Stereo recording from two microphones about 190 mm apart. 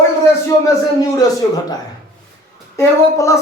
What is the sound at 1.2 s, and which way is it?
Speech, 20° left (ahead or behind).